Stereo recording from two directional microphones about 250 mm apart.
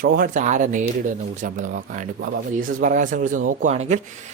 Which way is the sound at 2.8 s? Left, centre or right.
Right.